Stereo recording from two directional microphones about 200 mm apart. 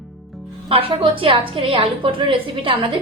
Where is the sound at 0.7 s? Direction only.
25° right (ahead or behind).